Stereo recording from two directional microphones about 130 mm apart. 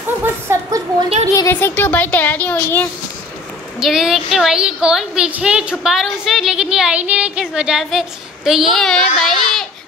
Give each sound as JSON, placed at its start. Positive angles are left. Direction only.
{"t": 0.2, "sound": "a sound", "side_deg": -25}
{"t": 1.3, "sound": "speech", "side_deg": 20}
{"t": 3.8, "sound": "a woman's voice", "side_deg": -5}